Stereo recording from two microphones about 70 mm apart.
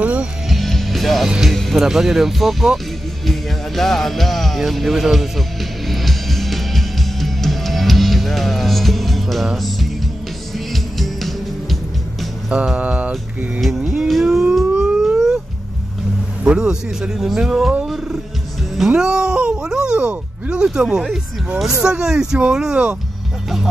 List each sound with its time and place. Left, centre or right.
0.0 s music: right
0.5 s music: centre
1.5 s speech: centre
3.3 s music: centre
12.4 s speech: centre
13.6 s speech: centre
14.0 s music: centre
16.4 s speech: centre
17.8 s music: centre
18.9 s speech: centre